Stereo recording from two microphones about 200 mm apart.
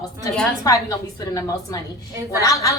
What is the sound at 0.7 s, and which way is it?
Speech, 20° left (ahead or behind).